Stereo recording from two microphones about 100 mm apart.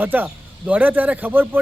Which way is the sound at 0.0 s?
20° right (ahead or behind).